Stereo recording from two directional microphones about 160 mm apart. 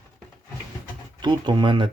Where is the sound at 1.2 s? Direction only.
30° right (ahead or behind).